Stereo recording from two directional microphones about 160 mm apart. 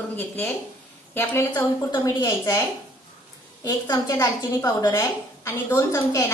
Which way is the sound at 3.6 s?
20° left (ahead or behind).